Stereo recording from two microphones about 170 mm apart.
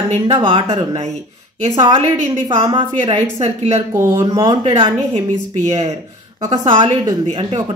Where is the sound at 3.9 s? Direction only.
15° right (ahead or behind).